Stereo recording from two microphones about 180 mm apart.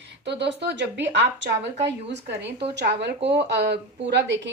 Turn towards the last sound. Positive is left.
turn(degrees=-70)  # may be behind; listen again after turning